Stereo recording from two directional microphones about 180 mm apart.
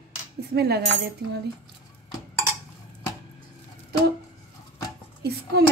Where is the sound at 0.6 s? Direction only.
65° right (ahead or behind).